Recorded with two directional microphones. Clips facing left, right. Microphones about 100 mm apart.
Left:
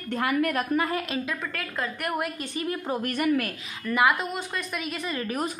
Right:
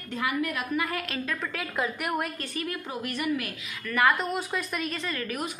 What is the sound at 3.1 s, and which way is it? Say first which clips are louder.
Speech: left 4 dB; 50° left (ahead or behind).